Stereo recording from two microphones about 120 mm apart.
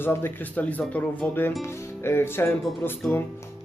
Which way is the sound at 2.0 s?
20° left (ahead or behind).